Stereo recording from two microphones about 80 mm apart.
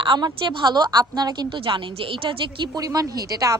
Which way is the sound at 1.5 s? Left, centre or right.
Right.